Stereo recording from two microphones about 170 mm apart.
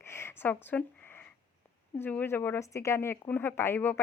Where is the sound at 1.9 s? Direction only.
10° left (ahead or behind).